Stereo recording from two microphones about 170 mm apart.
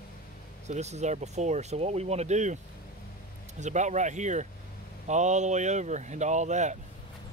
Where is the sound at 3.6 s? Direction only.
45° right (ahead or behind).